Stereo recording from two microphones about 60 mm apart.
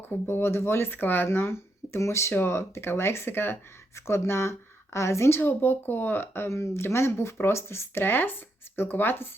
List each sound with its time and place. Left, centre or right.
0.3 s speech: left
2.0 s speech: left
5.4 s speech: left
6.5 s speech: left